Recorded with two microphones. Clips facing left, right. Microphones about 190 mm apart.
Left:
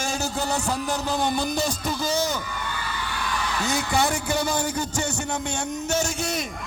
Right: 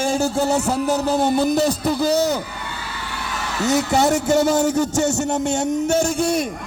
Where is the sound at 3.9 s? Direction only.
45° right (ahead or behind).